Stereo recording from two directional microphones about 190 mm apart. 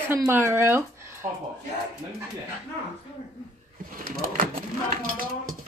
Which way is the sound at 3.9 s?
45° right (ahead or behind).